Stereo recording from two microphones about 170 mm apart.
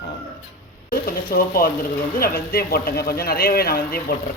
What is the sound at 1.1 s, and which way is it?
Speech, 60° left (ahead or behind).